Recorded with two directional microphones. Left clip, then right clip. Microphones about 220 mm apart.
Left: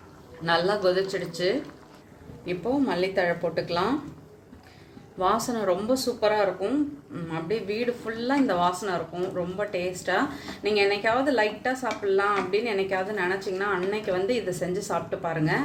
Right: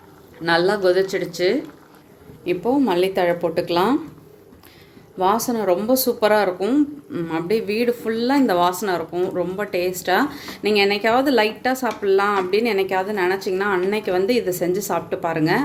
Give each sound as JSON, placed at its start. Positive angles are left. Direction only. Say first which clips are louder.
{"t": 0.4, "sound": "speech", "louder": "right 6 dB", "side_deg": -35}
{"t": 5.2, "sound": "speech", "louder": "right 5 dB", "side_deg": -30}